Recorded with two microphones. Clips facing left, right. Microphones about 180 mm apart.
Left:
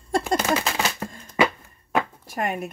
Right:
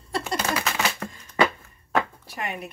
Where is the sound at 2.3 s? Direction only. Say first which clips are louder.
Left 6 dB; 45° left (ahead or behind).